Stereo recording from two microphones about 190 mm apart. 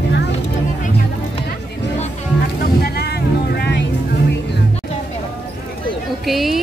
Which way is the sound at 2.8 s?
60° left (ahead or behind).